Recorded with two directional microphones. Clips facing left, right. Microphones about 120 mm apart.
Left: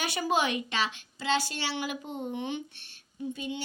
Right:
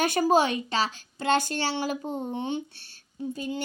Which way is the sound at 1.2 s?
50° right (ahead or behind).